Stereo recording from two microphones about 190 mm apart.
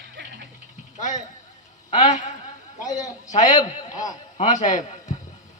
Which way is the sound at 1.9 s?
40° left (ahead or behind).